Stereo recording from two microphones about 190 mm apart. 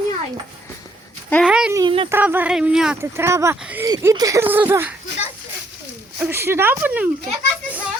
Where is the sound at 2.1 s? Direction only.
10° right (ahead or behind).